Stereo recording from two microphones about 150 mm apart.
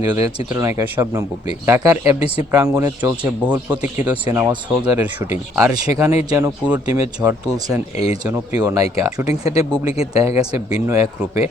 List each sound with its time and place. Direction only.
0.0 s speech: 20° right (ahead or behind)
7.9 s speech: 45° left (ahead or behind)
8.3 s speech: 20° right (ahead or behind)
9.2 s speech: 45° left (ahead or behind)
9.6 s speech: 20° right (ahead or behind)